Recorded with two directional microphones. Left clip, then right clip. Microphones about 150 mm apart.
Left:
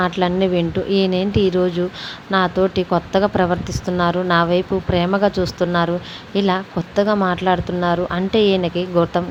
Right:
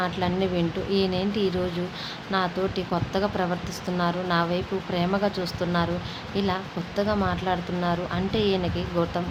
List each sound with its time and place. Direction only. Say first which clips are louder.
0.0 s speech: left 8 dB; 45° left (ahead or behind)